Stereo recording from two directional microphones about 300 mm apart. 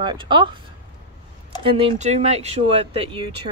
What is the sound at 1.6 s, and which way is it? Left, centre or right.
Speech, centre.